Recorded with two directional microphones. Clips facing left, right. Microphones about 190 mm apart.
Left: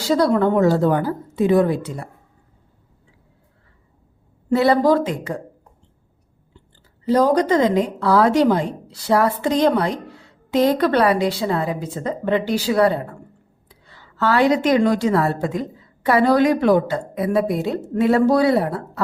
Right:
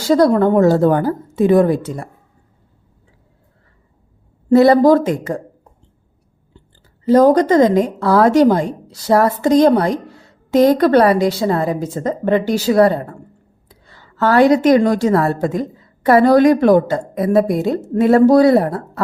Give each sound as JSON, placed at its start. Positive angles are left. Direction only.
{"t": 0.1, "sound": "a woman's voice", "side_deg": -45}
{"t": 4.4, "sound": "a woman's voice", "side_deg": -40}
{"t": 7.1, "sound": "a woman's voice", "side_deg": -45}